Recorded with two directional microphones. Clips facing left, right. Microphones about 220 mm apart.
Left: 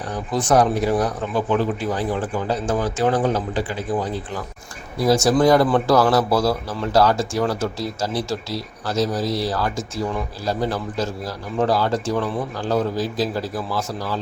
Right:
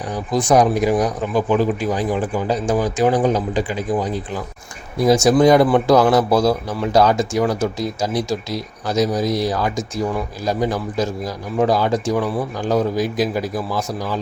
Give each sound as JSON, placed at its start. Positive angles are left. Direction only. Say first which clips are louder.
{"t": 0.1, "sound": "a man's voice", "louder": "right 3 dB", "side_deg": -10}